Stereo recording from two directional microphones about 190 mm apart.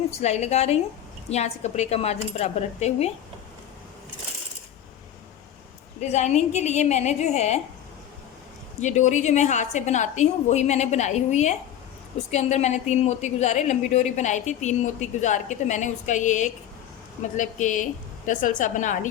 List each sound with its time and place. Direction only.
0.1 s a woman's voice: 35° left (ahead or behind)
6.0 s a woman's voice: 35° left (ahead or behind)
8.8 s a woman's voice: 40° left (ahead or behind)